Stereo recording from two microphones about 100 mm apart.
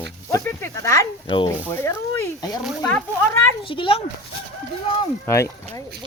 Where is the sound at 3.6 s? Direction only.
60° left (ahead or behind).